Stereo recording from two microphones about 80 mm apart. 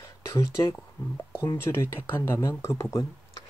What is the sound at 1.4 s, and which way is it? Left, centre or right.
Speech, left.